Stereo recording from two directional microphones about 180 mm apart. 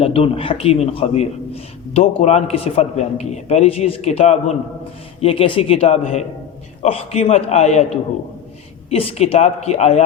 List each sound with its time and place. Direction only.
0.0 s a man's voice: 35° left (ahead or behind)